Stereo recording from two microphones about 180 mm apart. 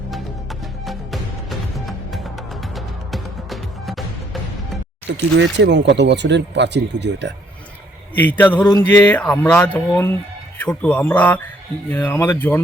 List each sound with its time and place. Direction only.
0.9 s music: centre (ahead or behind)
5.0 s speech: 75° right (ahead or behind)
8.1 s a sound: 10° left (ahead or behind)